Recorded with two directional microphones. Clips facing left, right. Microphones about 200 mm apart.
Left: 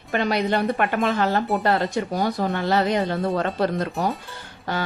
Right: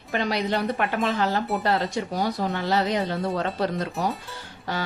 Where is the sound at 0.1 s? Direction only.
55° left (ahead or behind).